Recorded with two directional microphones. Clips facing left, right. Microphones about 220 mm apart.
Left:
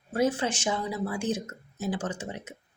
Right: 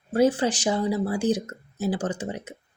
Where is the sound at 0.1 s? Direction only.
30° right (ahead or behind).